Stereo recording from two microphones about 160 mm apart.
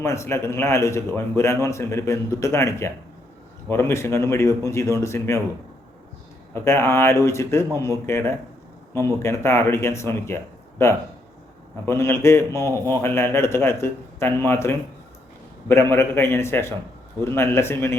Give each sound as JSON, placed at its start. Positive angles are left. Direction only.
{"t": 0.0, "sound": "a man's voice", "side_deg": 15}
{"t": 6.5, "sound": "a man's voice", "side_deg": 15}